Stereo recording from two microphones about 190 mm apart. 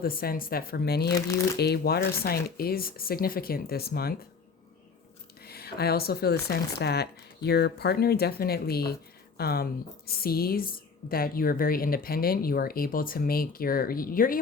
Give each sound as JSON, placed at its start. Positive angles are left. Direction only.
{"t": 0.0, "sound": "speech", "side_deg": 50}
{"t": 5.4, "sound": "speech", "side_deg": 55}